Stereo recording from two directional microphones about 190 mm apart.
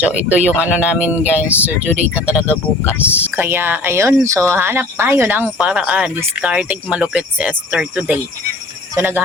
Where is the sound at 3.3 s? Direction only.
10° right (ahead or behind).